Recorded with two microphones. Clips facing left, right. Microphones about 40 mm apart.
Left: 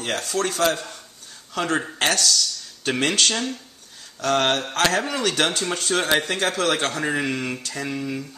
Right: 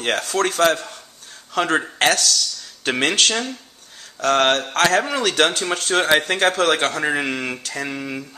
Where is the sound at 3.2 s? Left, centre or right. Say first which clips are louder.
Right 2 dB; centre.